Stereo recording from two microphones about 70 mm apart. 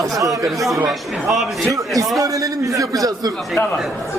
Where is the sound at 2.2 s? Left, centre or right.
Right.